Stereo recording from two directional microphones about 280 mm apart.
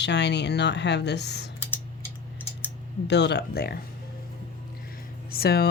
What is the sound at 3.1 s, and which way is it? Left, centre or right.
Speech, left.